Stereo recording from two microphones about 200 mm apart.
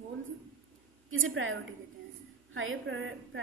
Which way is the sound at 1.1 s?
80° right.